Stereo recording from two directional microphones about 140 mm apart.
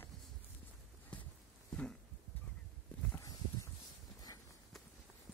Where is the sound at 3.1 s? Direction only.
20° left (ahead or behind).